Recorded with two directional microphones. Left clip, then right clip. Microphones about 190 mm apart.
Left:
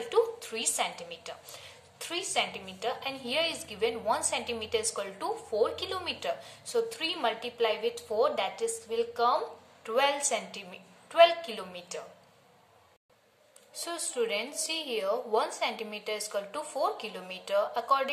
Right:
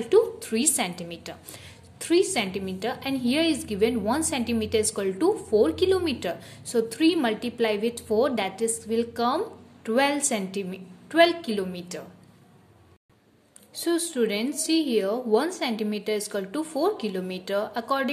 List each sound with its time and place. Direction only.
0.1 s a woman's voice: 30° right (ahead or behind)
13.7 s a woman's voice: 25° right (ahead or behind)